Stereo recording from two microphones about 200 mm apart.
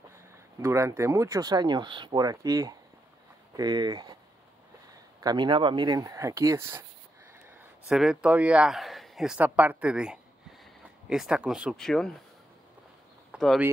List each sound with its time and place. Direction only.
0.6 s speech: 15° right (ahead or behind)
7.9 s a man's voice: 5° right (ahead or behind)
13.3 s a sound: centre (ahead or behind)